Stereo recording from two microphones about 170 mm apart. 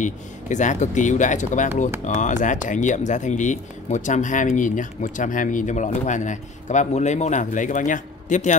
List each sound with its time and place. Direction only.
0.0 s speech: 45° left (ahead or behind)